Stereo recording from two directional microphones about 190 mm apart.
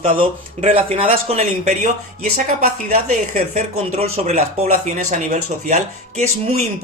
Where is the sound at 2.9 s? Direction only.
35° right (ahead or behind).